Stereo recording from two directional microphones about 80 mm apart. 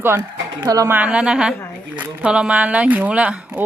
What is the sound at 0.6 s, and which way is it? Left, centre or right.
Speech, right.